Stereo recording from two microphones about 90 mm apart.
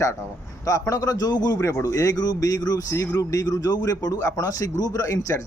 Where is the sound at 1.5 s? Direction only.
30° left (ahead or behind).